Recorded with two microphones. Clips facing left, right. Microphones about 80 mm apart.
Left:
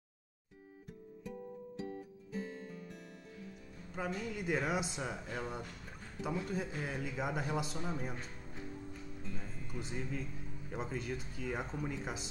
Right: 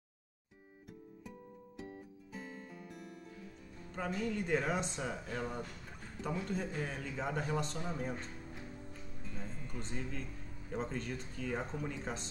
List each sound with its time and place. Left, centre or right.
2.3 s music: centre
3.9 s a man's voice: centre